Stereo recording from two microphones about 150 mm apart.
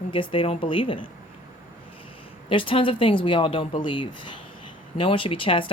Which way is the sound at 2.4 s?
35° left (ahead or behind).